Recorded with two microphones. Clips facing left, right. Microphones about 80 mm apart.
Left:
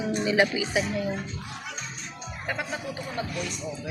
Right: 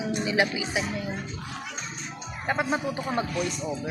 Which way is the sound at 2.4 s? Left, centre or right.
Right.